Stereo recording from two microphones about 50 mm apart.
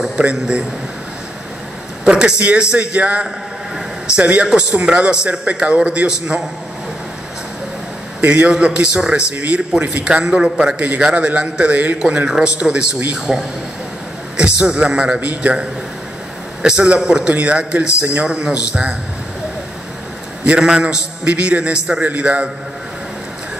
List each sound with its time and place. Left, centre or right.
0.2 s a man's voice: right
2.0 s a man's voice: centre
8.2 s a man's voice: right
14.3 s a man's voice: right
15.1 s a man's voice: right
16.6 s a man's voice: right
20.4 s a man's voice: centre